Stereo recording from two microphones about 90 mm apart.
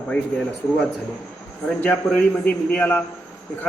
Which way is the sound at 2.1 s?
15° left (ahead or behind).